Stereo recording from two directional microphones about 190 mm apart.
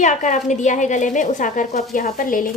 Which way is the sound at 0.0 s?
40° left (ahead or behind).